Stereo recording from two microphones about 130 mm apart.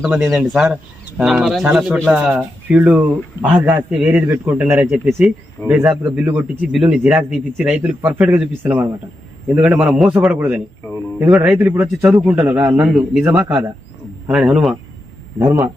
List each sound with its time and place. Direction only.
0.2 s speech: centre (ahead or behind)
4.8 s speech: centre (ahead or behind)
9.6 s speech: 5° right (ahead or behind)
11.9 s speech: 5° right (ahead or behind)